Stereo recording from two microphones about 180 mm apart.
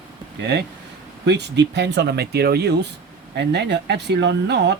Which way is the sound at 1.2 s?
70° right (ahead or behind).